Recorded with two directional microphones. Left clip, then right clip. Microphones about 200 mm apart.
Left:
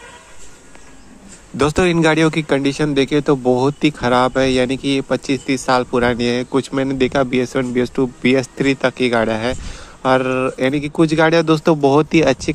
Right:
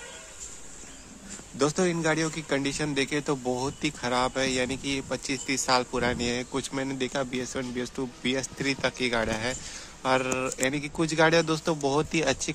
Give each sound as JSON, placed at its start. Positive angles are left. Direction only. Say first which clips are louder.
{"t": 1.6, "sound": "a man's voice", "louder": "left 11 dB", "side_deg": 45}